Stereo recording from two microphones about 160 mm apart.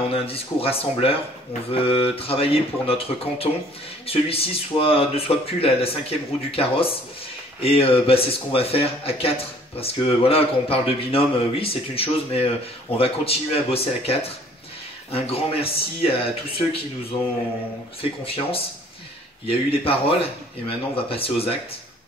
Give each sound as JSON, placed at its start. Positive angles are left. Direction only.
{"t": 0.1, "sound": "speech", "side_deg": 35}
{"t": 18.0, "sound": "speech", "side_deg": 35}